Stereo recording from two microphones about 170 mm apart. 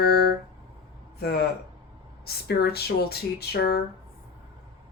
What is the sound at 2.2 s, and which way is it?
Speech, 70° left (ahead or behind).